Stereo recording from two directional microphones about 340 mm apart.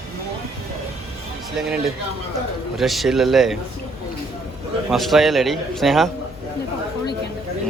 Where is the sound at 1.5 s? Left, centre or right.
Centre.